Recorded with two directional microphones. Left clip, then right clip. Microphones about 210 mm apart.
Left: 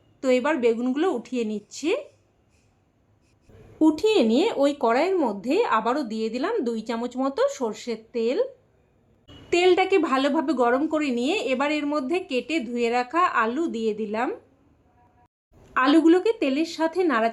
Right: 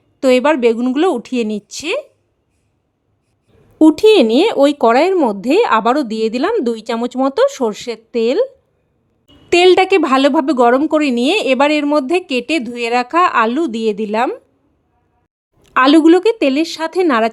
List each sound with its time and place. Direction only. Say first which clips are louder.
0.2 s a woman's voice: right 10 dB; 50° right (ahead or behind)
3.8 s a woman's voice: right 11 dB; 50° right (ahead or behind)
9.5 s a woman's voice: right 10 dB; 50° right (ahead or behind)
15.6 s a woman's voice: right 9 dB; 50° right (ahead or behind)